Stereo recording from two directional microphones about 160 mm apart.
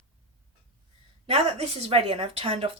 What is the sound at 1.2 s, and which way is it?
A woman's voice, 40° right (ahead or behind).